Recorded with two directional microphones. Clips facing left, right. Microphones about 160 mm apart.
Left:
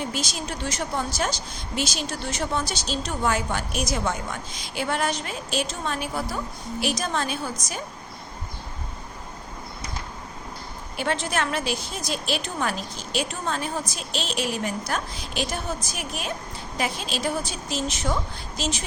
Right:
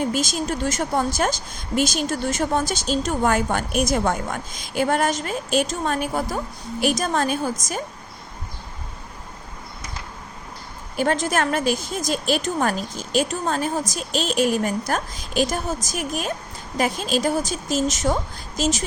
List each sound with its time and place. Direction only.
0.1 s speech: 45° right (ahead or behind)
10.9 s speech: 45° right (ahead or behind)